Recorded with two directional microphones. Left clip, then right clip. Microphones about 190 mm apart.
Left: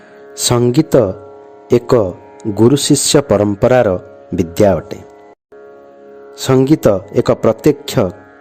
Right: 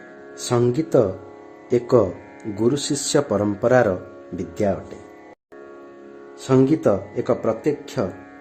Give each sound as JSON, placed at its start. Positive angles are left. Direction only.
{"t": 0.4, "sound": "a man's voice", "side_deg": 50}
{"t": 6.5, "sound": "a man's voice", "side_deg": 55}